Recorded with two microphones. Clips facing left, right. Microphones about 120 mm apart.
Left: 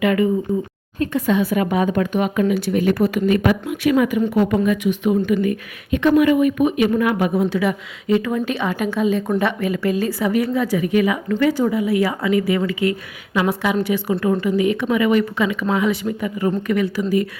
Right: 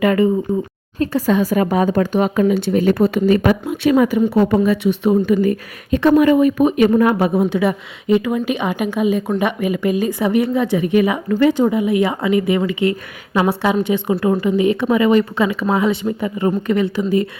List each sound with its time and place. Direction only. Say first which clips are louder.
0.0 s a woman's voice: right 3 dB; 35° right (ahead or behind)